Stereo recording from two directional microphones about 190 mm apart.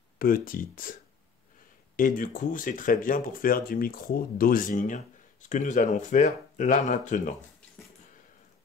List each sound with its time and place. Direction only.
0.2 s speech: 50° left (ahead or behind)
2.0 s speech: 45° left (ahead or behind)